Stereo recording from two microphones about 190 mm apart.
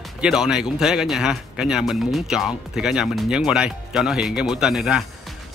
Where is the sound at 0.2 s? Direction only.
5° right (ahead or behind).